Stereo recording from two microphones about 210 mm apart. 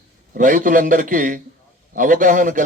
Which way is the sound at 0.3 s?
40° right (ahead or behind).